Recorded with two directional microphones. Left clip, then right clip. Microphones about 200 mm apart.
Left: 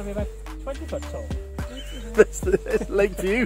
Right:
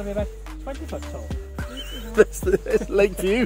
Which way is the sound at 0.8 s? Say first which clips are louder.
Left 2 dB; centre (ahead or behind).